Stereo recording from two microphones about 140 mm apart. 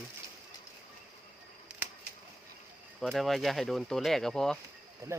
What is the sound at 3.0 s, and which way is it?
Speech, centre (ahead or behind).